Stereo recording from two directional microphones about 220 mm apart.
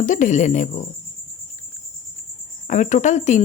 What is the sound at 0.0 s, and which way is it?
Speech, 35° left (ahead or behind).